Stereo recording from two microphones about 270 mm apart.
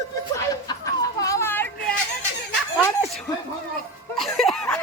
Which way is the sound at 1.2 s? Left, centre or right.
Centre.